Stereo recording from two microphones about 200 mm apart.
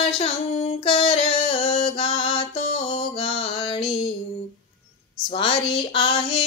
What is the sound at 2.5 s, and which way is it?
Music, 35° left (ahead or behind).